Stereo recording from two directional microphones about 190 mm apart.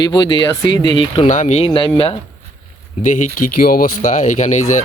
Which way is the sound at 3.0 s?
40° left (ahead or behind).